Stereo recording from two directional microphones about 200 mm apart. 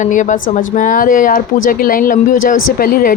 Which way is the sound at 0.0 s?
40° left (ahead or behind).